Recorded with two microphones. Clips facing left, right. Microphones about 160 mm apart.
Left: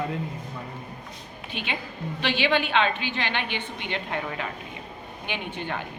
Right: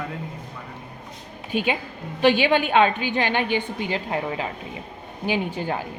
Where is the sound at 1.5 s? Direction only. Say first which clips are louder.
Right 9 dB; 45° right (ahead or behind).